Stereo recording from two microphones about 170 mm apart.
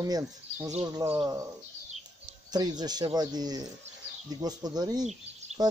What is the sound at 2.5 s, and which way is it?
Speech, 25° right (ahead or behind).